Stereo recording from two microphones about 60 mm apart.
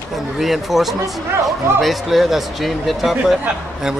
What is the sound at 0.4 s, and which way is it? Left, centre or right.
Speech, centre.